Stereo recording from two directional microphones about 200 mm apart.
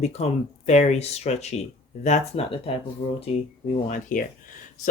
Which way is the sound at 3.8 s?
40° left (ahead or behind).